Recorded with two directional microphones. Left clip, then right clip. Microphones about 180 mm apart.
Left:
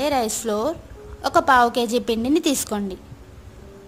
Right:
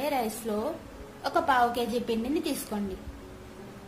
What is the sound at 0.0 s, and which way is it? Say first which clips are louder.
A woman's voice: left 8 dB; 55° left (ahead or behind).